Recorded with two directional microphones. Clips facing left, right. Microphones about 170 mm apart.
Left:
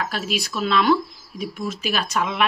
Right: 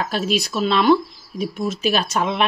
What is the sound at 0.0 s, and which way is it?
A woman's voice, 25° right (ahead or behind).